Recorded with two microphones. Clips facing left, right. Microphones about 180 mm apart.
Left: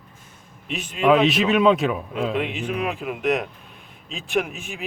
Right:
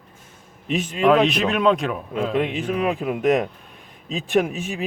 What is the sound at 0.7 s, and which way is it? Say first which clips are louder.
Speech: right 7 dB; 45° right (ahead or behind).